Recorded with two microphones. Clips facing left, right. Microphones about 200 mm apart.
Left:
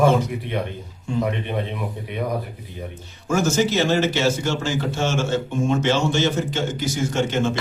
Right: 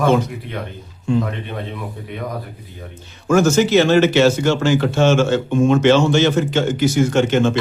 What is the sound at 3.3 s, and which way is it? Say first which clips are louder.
Speech: right 6 dB; 70° right (ahead or behind).